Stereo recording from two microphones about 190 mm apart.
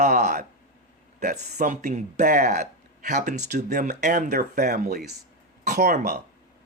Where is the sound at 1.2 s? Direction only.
40° right (ahead or behind).